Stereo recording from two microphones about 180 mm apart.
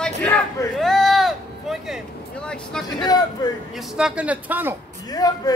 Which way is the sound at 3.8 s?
5° right (ahead or behind).